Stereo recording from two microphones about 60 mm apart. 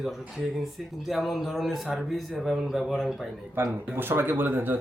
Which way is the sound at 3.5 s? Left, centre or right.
Right.